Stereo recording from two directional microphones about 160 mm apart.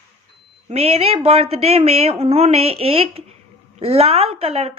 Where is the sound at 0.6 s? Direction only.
40° right (ahead or behind).